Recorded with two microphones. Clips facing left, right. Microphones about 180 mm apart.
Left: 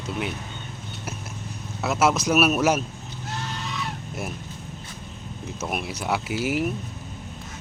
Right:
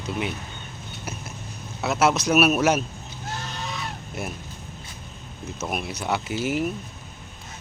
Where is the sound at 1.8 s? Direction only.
Centre (ahead or behind).